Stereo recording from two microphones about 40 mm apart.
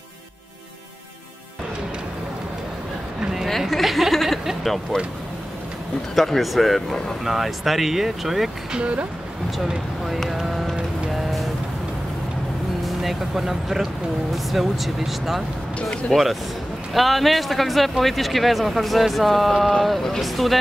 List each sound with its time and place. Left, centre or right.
3.7 s a sound: centre
4.9 s speech: centre
6.1 s speech: centre
7.2 s speech: centre
8.7 s speech: right
9.6 s speech: centre
10.3 s music: centre
12.8 s speech: centre